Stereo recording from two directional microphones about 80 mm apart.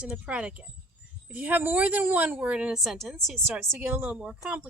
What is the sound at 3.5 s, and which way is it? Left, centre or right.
Speech, right.